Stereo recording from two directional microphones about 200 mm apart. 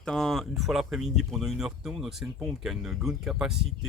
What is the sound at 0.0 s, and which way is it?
Speech, centre (ahead or behind).